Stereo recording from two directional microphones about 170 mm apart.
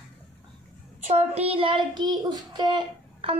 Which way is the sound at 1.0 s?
40° right (ahead or behind).